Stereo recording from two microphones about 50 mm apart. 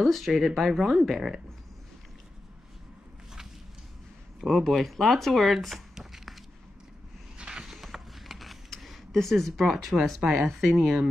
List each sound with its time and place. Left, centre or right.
0.0 s speech: centre
4.4 s speech: centre
7.3 s a sound: centre